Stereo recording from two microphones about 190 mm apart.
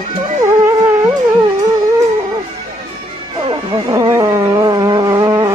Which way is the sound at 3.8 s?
20° right (ahead or behind).